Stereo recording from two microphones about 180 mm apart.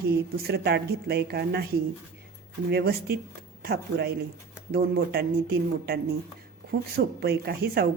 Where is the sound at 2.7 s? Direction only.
60° right (ahead or behind).